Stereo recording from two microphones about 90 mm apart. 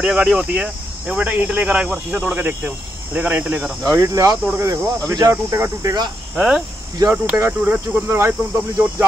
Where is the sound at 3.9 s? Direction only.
35° right (ahead or behind).